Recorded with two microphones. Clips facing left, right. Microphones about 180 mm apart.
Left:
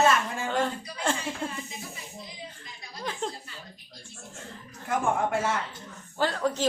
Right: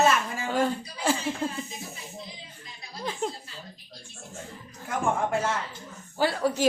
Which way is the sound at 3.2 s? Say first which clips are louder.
Right 3 dB; 10° right (ahead or behind).